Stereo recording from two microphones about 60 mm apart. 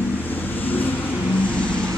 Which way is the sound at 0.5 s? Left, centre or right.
Left.